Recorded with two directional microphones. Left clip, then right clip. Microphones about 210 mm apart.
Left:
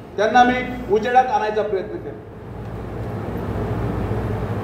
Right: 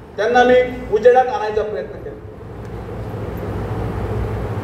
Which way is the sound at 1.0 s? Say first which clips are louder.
Right 5 dB; 25° right (ahead or behind).